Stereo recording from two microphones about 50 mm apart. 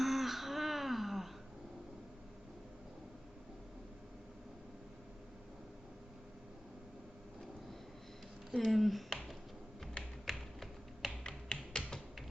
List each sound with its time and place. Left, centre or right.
0.0 s a sound: centre
8.5 s speech: centre
10.2 s tap: centre
11.3 s finger snapping: centre